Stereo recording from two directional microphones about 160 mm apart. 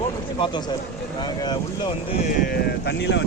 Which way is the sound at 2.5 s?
90° left.